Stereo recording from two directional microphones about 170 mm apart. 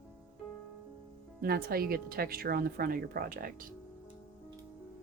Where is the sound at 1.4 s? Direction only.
65° right (ahead or behind).